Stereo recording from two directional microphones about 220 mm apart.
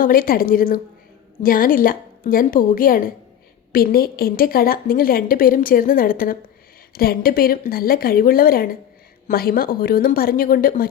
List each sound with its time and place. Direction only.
0.0 s a woman's voice: 40° left (ahead or behind)